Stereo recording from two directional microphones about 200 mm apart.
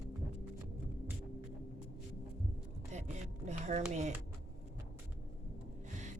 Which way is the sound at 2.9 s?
35° right (ahead or behind).